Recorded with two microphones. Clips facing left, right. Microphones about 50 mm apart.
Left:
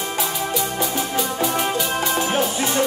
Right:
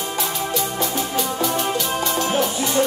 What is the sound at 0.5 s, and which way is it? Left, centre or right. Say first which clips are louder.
Music: even; centre.